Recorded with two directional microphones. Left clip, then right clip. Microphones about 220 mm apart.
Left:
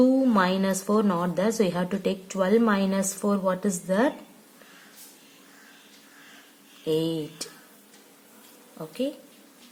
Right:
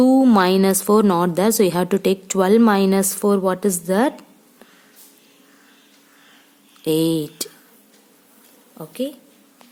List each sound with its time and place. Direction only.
0.0 s a woman's voice: 50° right (ahead or behind)
6.8 s a woman's voice: 50° right (ahead or behind)